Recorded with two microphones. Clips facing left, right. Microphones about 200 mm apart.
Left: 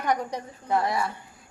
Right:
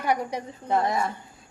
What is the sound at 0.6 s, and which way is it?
Speech, 25° right (ahead or behind).